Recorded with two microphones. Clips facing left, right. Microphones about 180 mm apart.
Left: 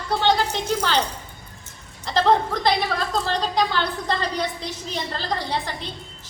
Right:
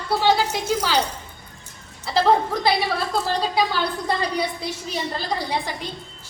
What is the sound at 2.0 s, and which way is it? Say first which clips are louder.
A woman's voice: right 1 dB; 10° right (ahead or behind).